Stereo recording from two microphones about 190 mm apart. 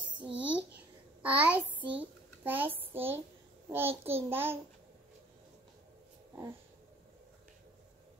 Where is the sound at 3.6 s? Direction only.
10° right (ahead or behind).